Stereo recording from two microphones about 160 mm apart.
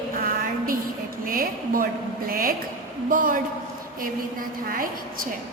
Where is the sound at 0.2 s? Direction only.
65° right (ahead or behind).